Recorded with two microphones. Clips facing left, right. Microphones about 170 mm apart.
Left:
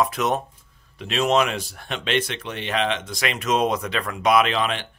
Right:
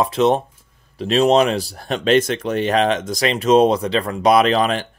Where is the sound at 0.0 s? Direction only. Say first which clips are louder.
Right 6 dB; 30° right (ahead or behind).